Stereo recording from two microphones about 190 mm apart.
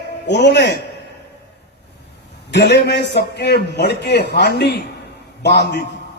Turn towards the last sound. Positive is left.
turn(degrees=60)  # may be behind; listen again after turning